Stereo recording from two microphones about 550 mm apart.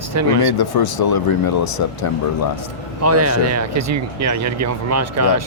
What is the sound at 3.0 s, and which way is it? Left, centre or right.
Speech, right.